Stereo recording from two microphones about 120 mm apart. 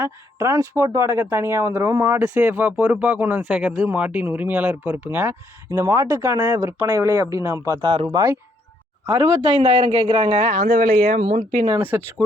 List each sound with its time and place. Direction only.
0.0 s speech: 25° right (ahead or behind)
7.7 s speech: 40° right (ahead or behind)
9.6 s speech: 45° right (ahead or behind)
10.4 s speech: 90° right
11.8 s speech: 20° right (ahead or behind)